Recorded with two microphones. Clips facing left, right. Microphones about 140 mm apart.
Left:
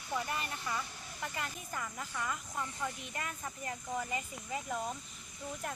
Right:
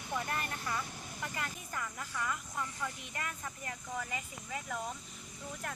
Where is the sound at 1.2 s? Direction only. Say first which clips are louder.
Left 1 dB; 20° left (ahead or behind).